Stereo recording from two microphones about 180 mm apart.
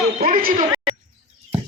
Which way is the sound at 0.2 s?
50° right (ahead or behind).